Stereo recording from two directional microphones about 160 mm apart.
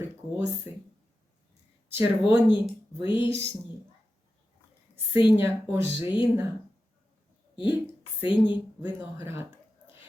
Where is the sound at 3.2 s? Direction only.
15° right (ahead or behind).